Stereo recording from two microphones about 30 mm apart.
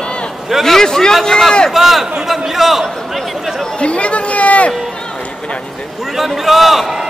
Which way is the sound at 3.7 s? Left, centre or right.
Left.